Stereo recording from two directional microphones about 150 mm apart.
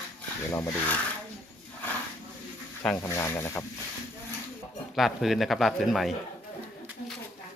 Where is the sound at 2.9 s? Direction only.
20° left (ahead or behind).